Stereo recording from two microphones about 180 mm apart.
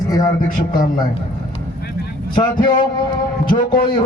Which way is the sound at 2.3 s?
25° left (ahead or behind).